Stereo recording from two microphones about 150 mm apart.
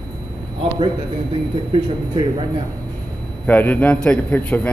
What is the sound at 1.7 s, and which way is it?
Speech, 35° right (ahead or behind).